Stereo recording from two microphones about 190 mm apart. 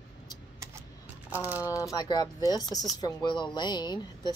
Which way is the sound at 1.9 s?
20° left (ahead or behind).